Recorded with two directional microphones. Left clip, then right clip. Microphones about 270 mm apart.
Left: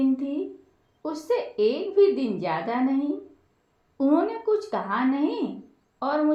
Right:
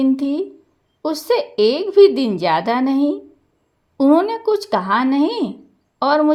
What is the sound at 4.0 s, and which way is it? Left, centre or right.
A woman's voice, right.